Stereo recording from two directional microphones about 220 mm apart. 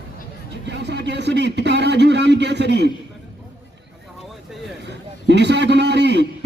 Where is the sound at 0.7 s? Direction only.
50° right (ahead or behind).